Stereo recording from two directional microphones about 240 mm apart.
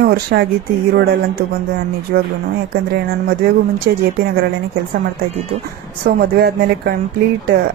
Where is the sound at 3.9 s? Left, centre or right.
Right.